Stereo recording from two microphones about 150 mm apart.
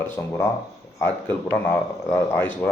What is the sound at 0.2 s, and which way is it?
Speech, 15° left (ahead or behind).